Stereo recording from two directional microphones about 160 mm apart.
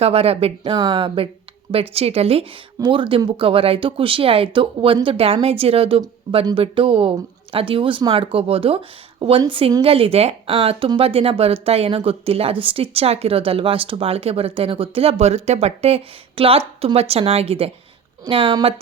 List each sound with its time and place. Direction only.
0.0 s speech: 40° right (ahead or behind)